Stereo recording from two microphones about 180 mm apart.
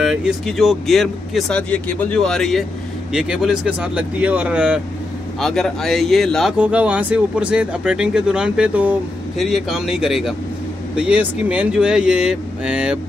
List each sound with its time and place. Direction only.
0.0 s speech: 5° right (ahead or behind)